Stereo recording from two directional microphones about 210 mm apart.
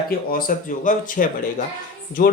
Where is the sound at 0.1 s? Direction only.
40° left (ahead or behind).